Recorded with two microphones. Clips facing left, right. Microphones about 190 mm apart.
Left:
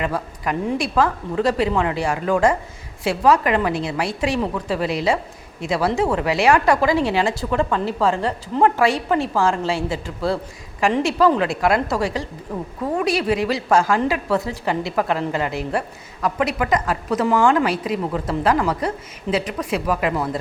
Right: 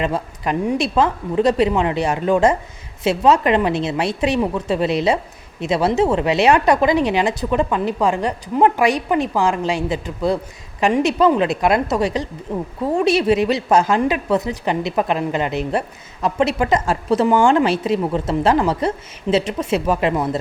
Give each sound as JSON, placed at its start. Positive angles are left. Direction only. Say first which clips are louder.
{"t": 0.0, "sound": "a woman's voice", "louder": "right 2 dB", "side_deg": -25}